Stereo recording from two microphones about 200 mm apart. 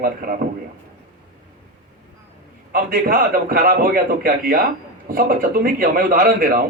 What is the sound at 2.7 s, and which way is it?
A man's voice, 50° right (ahead or behind).